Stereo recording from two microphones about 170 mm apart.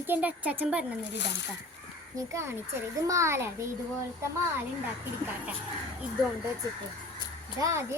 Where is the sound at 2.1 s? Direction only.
15° right (ahead or behind).